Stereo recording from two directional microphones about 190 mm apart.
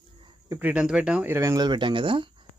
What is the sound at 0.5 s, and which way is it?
Speech, 5° right (ahead or behind).